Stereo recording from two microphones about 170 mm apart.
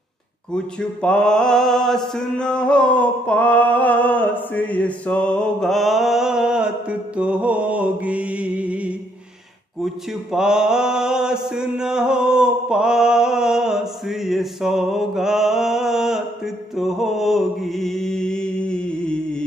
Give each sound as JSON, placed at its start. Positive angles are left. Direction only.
{"t": 0.7, "sound": "mantra", "side_deg": 5}
{"t": 10.3, "sound": "mantra", "side_deg": -5}